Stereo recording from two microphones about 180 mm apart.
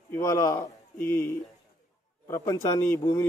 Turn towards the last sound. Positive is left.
turn(degrees=15)  # may be behind; listen again after turning